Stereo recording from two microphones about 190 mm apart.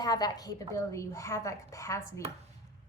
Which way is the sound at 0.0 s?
20° left (ahead or behind).